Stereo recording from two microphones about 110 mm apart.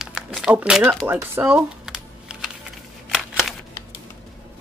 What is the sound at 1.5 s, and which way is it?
Typing, 5° right (ahead or behind).